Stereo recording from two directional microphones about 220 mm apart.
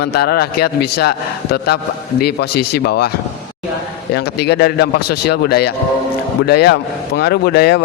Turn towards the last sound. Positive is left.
turn(degrees=50)  # may be behind; listen again after turning